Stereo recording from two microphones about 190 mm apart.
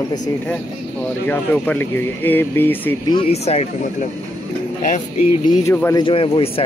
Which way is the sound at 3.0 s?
30° left (ahead or behind).